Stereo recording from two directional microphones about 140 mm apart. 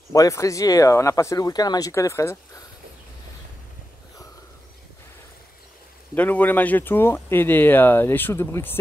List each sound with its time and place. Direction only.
0.1 s speech: 20° left (ahead or behind)
6.1 s speech: 10° left (ahead or behind)